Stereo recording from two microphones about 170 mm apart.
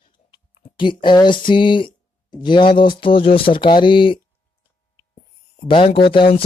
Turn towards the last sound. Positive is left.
turn(degrees=30)  # may be behind; listen again after turning